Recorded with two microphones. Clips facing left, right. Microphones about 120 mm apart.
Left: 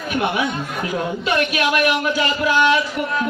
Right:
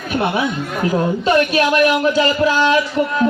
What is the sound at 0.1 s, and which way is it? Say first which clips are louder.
Speech: right 2 dB; 35° right (ahead or behind).